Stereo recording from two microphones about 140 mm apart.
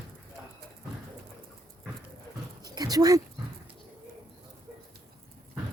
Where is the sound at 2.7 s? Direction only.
25° right (ahead or behind).